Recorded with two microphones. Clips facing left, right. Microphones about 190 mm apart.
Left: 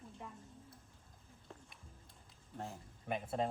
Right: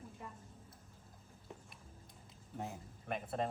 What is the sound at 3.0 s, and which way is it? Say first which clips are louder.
Speech: left 1 dB; centre (ahead or behind).